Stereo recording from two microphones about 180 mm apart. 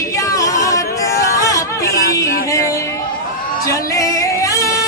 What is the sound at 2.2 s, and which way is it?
Music, 55° left (ahead or behind).